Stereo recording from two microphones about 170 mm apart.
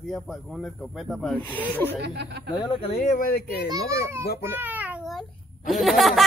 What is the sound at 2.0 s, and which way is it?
Speech, 85° right.